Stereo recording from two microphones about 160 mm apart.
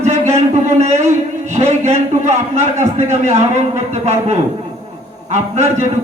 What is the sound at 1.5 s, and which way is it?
A man's voice, 45° right (ahead or behind).